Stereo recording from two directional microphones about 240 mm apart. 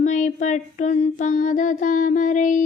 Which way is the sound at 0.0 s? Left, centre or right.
Left.